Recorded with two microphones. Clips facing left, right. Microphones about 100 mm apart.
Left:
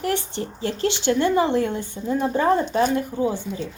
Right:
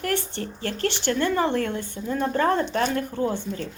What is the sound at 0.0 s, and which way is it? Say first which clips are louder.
A woman's voice: left 2 dB; 15° left (ahead or behind).